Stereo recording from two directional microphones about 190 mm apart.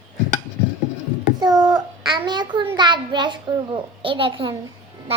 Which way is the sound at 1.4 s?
20° right (ahead or behind).